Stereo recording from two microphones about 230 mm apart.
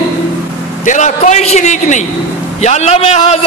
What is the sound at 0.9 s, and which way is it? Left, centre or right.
A man's voice, left.